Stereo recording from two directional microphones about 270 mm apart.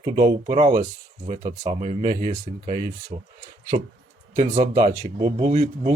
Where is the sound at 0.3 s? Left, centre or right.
Right.